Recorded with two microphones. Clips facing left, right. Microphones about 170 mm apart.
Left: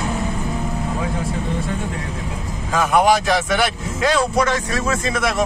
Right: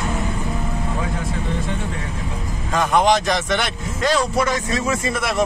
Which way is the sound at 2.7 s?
5° left (ahead or behind).